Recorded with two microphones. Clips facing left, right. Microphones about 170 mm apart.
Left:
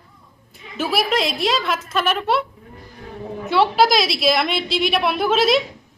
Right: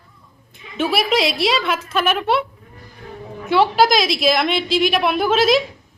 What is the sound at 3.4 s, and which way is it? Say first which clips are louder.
A woman's voice: right 1 dB; centre (ahead or behind).